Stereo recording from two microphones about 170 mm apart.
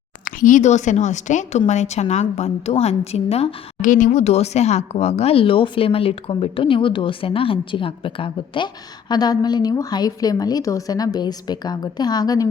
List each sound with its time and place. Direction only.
0.3 s speech: 50° left (ahead or behind); by 12.5 s 20° left (ahead or behind)